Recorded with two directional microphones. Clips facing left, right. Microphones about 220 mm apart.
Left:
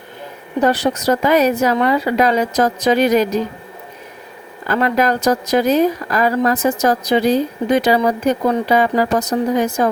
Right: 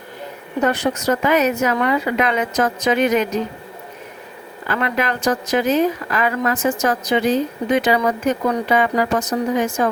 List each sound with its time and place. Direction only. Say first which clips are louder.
0.6 s a woman's voice: left 3 dB; 35° left (ahead or behind)
4.7 s a woman's voice: left 5 dB; 40° left (ahead or behind)